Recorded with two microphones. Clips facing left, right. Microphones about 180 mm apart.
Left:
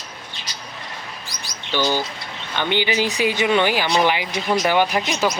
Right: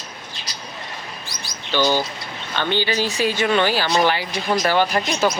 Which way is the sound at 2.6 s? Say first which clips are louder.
Left 1 dB; 15° left (ahead or behind).